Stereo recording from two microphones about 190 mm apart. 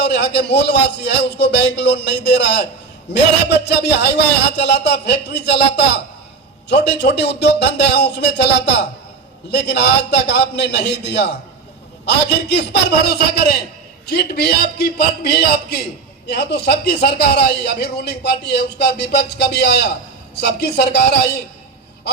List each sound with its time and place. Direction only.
0.0 s a man's voice: 60° left (ahead or behind)